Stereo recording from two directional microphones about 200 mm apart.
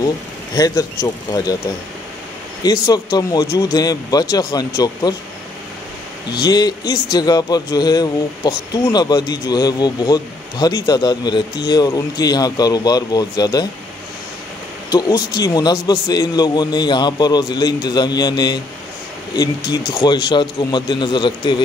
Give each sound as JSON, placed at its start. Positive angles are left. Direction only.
{"t": 0.6, "sound": "a man's voice", "side_deg": 20}
{"t": 2.6, "sound": "a man's voice", "side_deg": 20}
{"t": 6.3, "sound": "a man's voice", "side_deg": 20}
{"t": 14.9, "sound": "a man's voice", "side_deg": 20}